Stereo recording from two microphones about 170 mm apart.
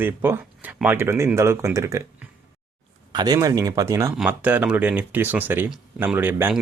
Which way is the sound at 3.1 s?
25° right (ahead or behind).